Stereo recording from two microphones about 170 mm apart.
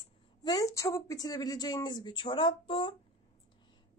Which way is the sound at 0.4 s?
20° left (ahead or behind).